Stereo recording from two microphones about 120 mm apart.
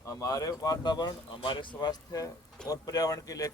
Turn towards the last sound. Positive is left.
turn(degrees=30)  # may be behind; listen again after turning